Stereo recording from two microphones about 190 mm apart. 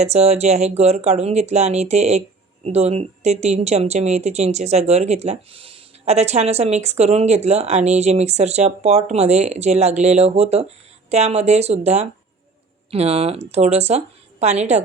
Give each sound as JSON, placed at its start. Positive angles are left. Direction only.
{"t": 0.0, "sound": "speech", "side_deg": -35}